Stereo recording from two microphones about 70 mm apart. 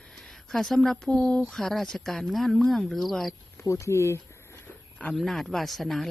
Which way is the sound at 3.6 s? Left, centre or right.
Left.